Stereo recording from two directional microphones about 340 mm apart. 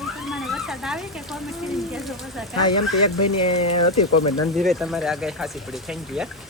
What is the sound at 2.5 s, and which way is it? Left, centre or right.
Speech, left.